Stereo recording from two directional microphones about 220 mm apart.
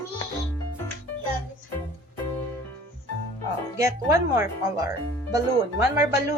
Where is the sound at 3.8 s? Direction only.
15° right (ahead or behind).